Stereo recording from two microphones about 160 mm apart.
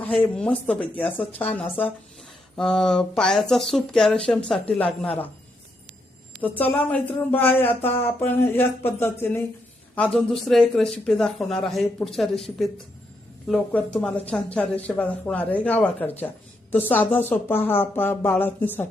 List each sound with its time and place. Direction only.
0.0 s speech: 5° left (ahead or behind)
6.6 s speech: 10° left (ahead or behind)
9.9 s speech: 5° left (ahead or behind)
13.5 s speech: 5° left (ahead or behind)